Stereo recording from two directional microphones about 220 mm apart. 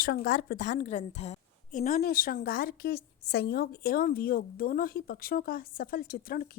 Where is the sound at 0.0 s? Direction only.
40° left (ahead or behind).